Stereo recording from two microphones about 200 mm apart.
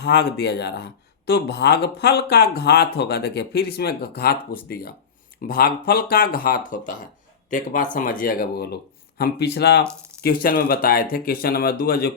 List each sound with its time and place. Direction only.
0.0 s speech: 60° left (ahead or behind)